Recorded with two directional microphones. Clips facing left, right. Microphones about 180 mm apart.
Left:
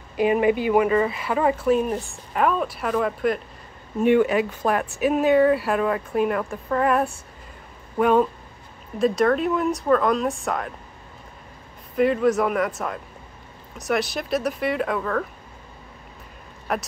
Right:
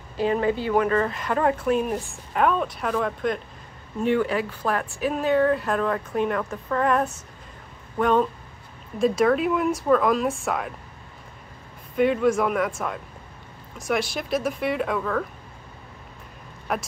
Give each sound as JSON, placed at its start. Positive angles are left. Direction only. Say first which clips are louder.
{"t": 0.2, "sound": "speech", "louder": "left 3 dB", "side_deg": 15}
{"t": 4.0, "sound": "speech", "louder": "left 4 dB", "side_deg": 15}
{"t": 11.9, "sound": "speech", "louder": "left 1 dB", "side_deg": 0}
{"t": 16.7, "sound": "speech", "louder": "left 1 dB", "side_deg": 0}